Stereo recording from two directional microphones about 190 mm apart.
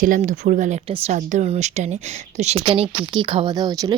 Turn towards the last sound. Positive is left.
turn(degrees=-20)  # may be behind; listen again after turning